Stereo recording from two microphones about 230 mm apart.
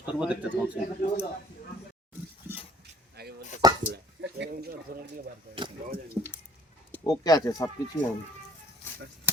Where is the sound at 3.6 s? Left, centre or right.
Centre.